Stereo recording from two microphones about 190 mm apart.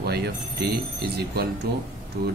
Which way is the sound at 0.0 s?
55° right (ahead or behind).